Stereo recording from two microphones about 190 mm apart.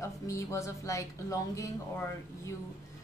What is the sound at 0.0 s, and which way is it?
A woman's voice, 15° left (ahead or behind).